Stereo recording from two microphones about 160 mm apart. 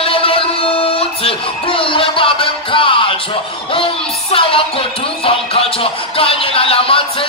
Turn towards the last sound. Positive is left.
turn(degrees=35)  # may be behind; listen again after turning